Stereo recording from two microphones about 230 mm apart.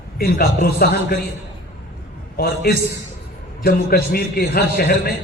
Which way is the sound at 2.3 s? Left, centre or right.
Left.